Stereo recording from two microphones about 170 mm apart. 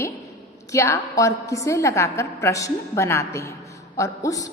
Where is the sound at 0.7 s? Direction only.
15° left (ahead or behind).